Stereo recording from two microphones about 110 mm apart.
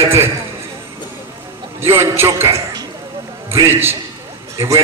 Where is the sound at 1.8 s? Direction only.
20° right (ahead or behind).